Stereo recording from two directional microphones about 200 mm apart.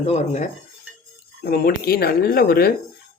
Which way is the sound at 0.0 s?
35° left (ahead or behind).